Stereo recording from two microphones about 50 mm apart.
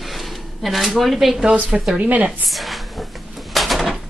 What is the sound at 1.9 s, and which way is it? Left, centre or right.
Speech, right.